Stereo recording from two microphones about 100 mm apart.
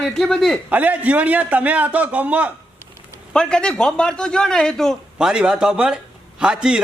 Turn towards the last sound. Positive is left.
turn(degrees=-10)  # may be behind; listen again after turning